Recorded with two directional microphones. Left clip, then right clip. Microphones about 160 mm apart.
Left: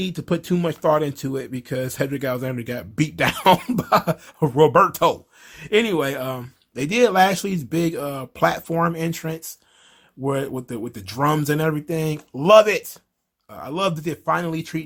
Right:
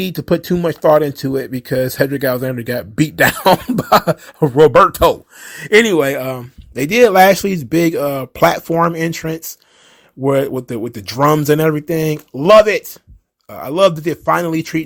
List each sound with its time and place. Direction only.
0.0 s speech: 30° right (ahead or behind)
3.8 s speech: 30° right (ahead or behind)
5.4 s speech: 40° right (ahead or behind)
13.5 s speech: 40° right (ahead or behind)